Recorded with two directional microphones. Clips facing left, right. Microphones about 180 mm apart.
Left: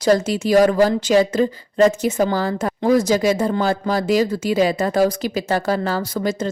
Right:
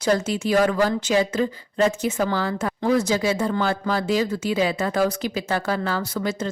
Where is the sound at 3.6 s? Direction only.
40° left (ahead or behind).